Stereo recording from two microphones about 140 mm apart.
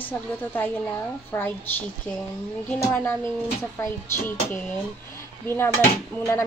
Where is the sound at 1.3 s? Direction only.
15° left (ahead or behind).